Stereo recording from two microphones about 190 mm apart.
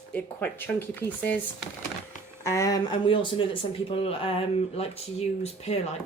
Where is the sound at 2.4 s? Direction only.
15° left (ahead or behind); by 5.8 s 35° left (ahead or behind).